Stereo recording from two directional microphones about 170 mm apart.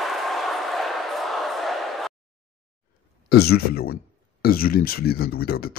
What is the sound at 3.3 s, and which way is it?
Speech, 70° left (ahead or behind).